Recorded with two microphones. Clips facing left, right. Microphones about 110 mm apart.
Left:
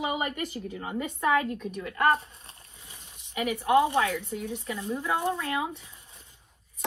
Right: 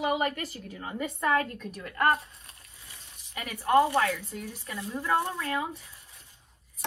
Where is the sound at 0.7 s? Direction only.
10° left (ahead or behind).